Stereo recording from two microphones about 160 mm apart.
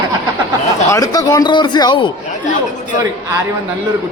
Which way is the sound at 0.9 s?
20° left (ahead or behind).